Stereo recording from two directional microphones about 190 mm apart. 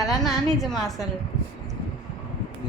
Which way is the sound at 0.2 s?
Centre (ahead or behind).